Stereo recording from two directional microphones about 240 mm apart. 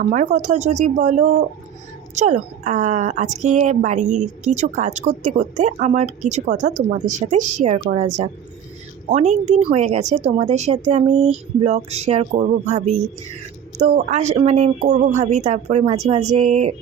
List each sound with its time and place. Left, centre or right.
0.0 s a woman's voice: right